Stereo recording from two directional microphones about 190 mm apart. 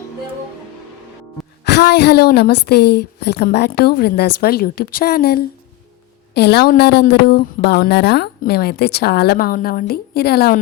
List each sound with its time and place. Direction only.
1.6 s a woman's voice: 60° left (ahead or behind)